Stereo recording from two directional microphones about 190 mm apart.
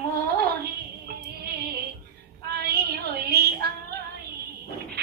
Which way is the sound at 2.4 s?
55° right (ahead or behind).